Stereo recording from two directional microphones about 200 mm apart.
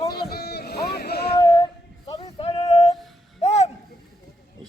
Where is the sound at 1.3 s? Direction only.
20° left (ahead or behind).